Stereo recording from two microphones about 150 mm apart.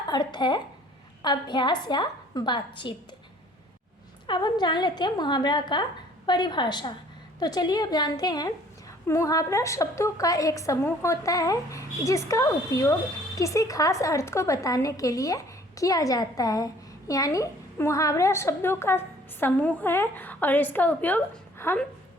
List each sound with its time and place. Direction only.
0.1 s a woman's voice: 30° left (ahead or behind)
4.3 s a woman's voice: 30° left (ahead or behind); by 21.8 s 15° left (ahead or behind)